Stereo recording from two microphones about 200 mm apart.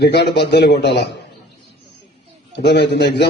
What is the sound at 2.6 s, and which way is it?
Speech, 60° left (ahead or behind).